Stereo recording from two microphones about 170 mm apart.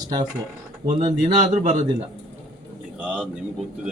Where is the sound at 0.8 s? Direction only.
45° right (ahead or behind).